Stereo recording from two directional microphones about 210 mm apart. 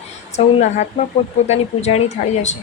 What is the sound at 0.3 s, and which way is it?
Speech, 35° left (ahead or behind).